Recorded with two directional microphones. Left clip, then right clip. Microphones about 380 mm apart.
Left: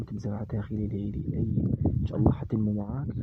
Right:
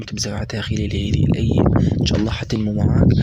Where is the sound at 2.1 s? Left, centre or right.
Left.